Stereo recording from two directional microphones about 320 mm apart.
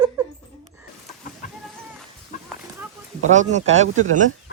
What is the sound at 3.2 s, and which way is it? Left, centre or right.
Speech, right.